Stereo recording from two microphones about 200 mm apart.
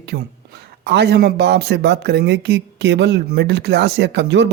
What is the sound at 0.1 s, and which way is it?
Speech, 50° right (ahead or behind).